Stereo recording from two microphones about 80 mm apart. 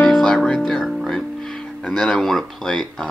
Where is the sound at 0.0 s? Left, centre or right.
Centre.